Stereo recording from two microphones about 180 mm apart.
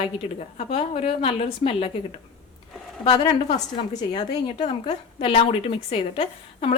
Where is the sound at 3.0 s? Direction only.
30° left (ahead or behind).